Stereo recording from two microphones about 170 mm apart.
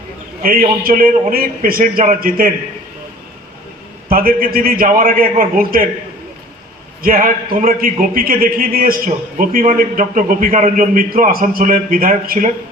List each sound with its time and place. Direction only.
0.4 s a man's voice: 60° right (ahead or behind)
4.1 s a man's voice: 60° right (ahead or behind)
7.0 s a man's voice: 55° right (ahead or behind)